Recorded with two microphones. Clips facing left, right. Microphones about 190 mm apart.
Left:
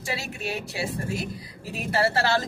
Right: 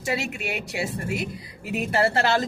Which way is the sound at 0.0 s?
20° right (ahead or behind).